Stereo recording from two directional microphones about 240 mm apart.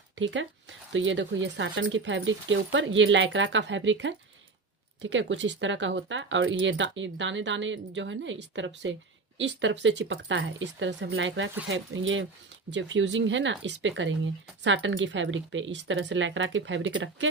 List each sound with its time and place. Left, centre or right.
0.2 s speech: right